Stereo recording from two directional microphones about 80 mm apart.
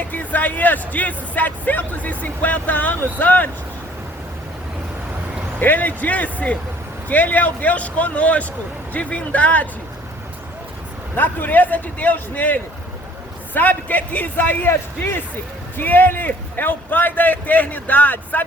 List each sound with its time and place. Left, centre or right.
0.1 s speech: left
5.5 s speech: left
11.1 s speech: left